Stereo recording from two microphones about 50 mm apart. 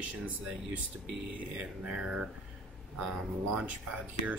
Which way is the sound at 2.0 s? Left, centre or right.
Centre.